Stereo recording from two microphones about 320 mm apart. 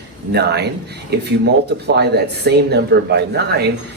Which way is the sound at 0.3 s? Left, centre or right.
Right.